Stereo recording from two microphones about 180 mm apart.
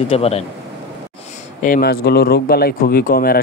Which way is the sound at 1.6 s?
55° left (ahead or behind).